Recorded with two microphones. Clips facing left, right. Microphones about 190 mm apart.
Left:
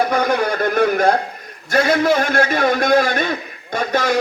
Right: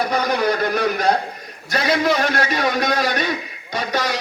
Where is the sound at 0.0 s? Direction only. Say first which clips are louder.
Left 2 dB; 50° left (ahead or behind).